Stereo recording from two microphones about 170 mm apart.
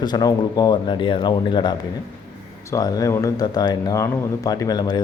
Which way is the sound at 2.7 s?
20° left (ahead or behind).